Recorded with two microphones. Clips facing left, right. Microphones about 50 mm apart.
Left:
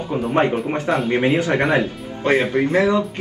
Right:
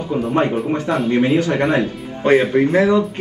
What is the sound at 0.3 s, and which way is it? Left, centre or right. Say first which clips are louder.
Speech: even; centre.